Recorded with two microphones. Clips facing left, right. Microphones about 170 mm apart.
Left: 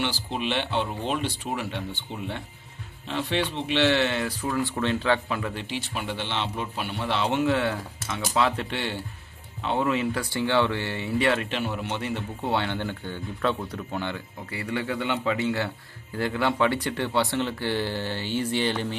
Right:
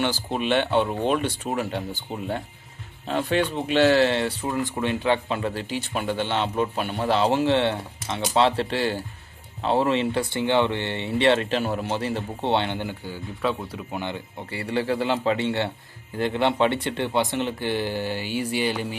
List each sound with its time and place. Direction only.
0.0 s speech: 50° right (ahead or behind); by 4.4 s 30° right (ahead or behind)
4.4 s speech: 15° right (ahead or behind)
5.4 s speech: 35° right (ahead or behind)
11.3 s speech: 40° right (ahead or behind); by 14.2 s 15° right (ahead or behind)
14.5 s speech: 30° right (ahead or behind); by 18.9 s 10° right (ahead or behind)